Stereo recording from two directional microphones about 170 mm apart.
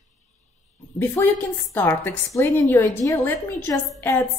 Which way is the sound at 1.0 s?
10° left (ahead or behind).